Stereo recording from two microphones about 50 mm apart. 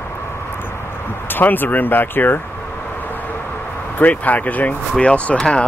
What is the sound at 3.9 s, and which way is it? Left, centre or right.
Speech, left.